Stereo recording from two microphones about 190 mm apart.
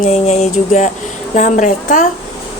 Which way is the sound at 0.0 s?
35° left (ahead or behind).